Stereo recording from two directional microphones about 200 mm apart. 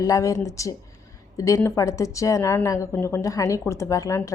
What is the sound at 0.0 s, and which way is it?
A woman's voice, 15° left (ahead or behind).